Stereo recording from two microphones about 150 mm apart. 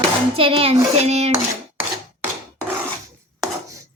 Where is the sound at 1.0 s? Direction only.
45° right (ahead or behind).